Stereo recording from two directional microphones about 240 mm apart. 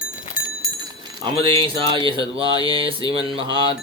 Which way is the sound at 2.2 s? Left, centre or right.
Centre.